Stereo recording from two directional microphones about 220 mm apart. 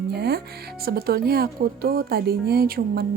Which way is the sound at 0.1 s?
45° right (ahead or behind).